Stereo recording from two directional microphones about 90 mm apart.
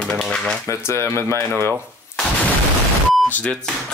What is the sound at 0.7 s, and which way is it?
Speech, 35° left (ahead or behind).